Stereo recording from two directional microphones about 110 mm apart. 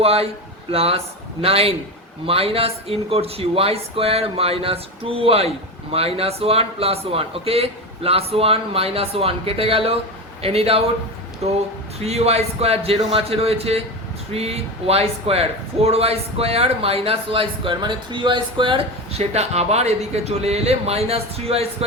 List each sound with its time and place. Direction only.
0.0 s speech: 65° right (ahead or behind); by 18.8 s 45° right (ahead or behind)
19.1 s speech: 75° right (ahead or behind)